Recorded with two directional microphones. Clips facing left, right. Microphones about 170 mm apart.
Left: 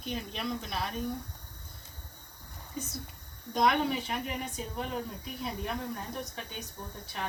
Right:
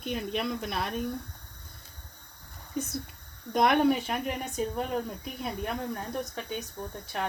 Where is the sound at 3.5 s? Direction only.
55° right (ahead or behind).